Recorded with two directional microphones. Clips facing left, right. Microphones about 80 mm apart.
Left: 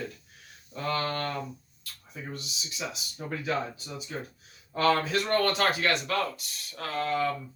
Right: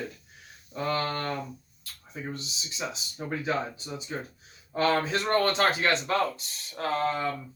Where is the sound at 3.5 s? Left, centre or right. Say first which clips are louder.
Even; right.